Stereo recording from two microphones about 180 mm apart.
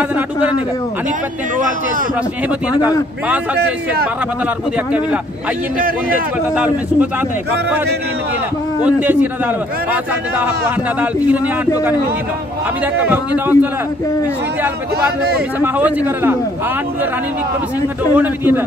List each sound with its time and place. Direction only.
5.8 s a man's voice: 50° right (ahead or behind)
6.5 s a man's voice: 5° right (ahead or behind)
8.8 s a man's voice: 10° right (ahead or behind)
11.0 s a man's voice: 10° right (ahead or behind)
13.0 s a man's voice: 10° right (ahead or behind)
15.6 s a man's voice: 10° right (ahead or behind)
18.1 s a man's voice: 10° right (ahead or behind)